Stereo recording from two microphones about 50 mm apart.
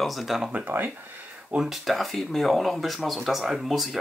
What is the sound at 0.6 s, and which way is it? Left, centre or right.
Speech, right.